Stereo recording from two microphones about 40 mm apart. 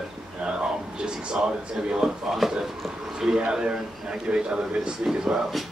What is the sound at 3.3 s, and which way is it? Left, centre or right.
A man's voice, right.